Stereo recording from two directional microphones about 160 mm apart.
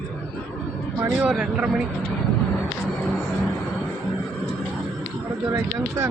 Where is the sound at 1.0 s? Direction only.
10° right (ahead or behind).